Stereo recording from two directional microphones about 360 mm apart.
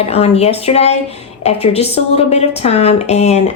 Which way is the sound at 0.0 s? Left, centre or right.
Centre.